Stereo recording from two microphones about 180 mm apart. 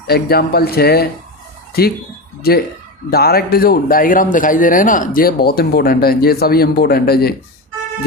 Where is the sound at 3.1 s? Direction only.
60° left (ahead or behind).